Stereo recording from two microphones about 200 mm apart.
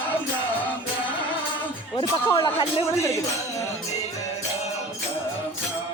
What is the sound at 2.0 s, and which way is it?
Speech, 20° left (ahead or behind).